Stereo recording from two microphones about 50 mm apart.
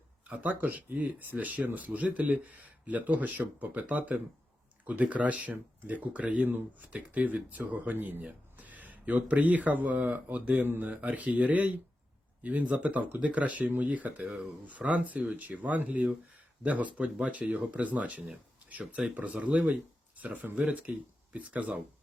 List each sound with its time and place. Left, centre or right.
0.3 s speech: right
8.2 s speech: right